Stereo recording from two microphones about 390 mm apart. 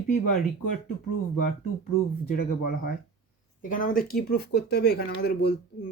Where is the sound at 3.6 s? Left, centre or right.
Left.